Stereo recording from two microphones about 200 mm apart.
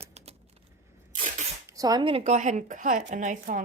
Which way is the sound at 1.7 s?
20° right (ahead or behind).